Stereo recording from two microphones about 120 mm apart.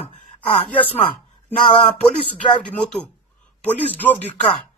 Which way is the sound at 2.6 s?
5° left (ahead or behind).